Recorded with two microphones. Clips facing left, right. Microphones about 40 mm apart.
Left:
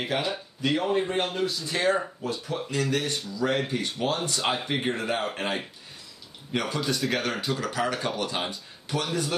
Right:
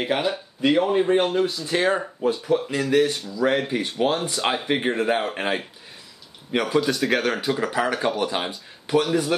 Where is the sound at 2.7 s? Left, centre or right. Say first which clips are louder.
Right 4 dB; centre.